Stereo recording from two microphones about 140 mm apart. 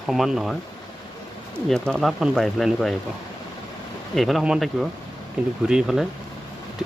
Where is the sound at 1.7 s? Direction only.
5° left (ahead or behind).